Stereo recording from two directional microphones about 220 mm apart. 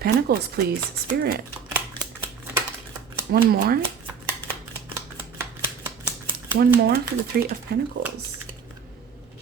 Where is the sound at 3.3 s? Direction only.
40° right (ahead or behind).